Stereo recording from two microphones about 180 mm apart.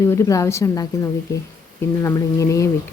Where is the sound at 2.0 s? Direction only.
15° left (ahead or behind).